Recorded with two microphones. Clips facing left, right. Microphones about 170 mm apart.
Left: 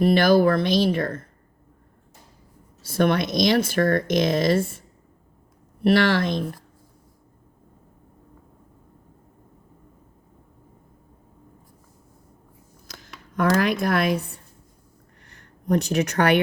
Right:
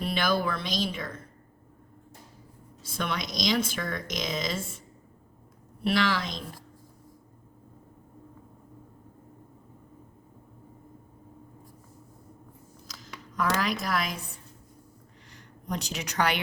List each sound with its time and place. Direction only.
0.0 s speech: 55° left (ahead or behind)
2.9 s speech: 55° left (ahead or behind)
5.8 s speech: 55° left (ahead or behind)
13.0 s a sound: 60° left (ahead or behind)
13.8 s speech: 60° left (ahead or behind)
15.3 s speech: 55° left (ahead or behind)